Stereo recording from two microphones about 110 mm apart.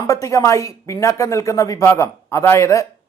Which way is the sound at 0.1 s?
30° left (ahead or behind).